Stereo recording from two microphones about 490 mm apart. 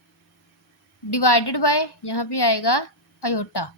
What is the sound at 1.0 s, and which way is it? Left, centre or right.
A woman's voice, left.